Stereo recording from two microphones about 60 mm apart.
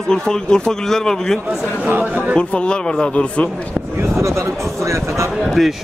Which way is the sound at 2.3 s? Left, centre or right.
Centre.